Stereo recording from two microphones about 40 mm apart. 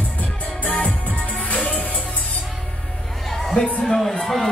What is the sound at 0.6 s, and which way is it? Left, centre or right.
Music, left.